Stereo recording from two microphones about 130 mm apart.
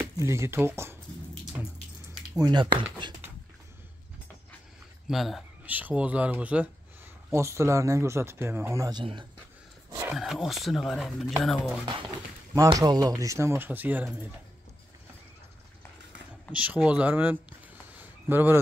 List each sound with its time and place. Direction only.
0.0 s speech: 20° right (ahead or behind)
2.3 s speech: 35° right (ahead or behind)
5.0 s speech: centre (ahead or behind)
5.7 s speech: 10° right (ahead or behind)
10.1 s speech: centre (ahead or behind)
12.7 s speech: 30° right (ahead or behind); by 14.3 s 15° right (ahead or behind)
16.5 s speech: 10° right (ahead or behind)